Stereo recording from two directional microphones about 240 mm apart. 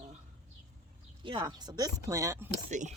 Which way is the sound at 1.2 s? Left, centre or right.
Centre.